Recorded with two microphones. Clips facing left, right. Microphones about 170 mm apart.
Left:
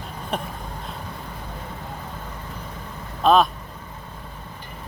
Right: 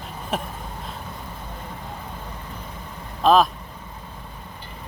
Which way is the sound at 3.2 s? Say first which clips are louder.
Even; centre (ahead or behind).